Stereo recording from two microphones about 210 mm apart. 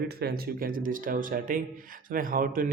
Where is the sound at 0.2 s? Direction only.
45° right (ahead or behind).